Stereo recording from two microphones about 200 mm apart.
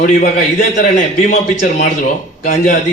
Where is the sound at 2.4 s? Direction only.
40° left (ahead or behind).